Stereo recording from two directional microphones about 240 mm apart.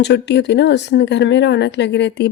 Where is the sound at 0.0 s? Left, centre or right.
Left.